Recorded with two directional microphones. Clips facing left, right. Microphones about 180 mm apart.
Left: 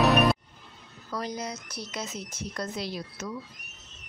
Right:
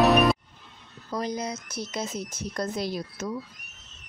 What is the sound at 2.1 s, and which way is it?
Speech, 45° right (ahead or behind).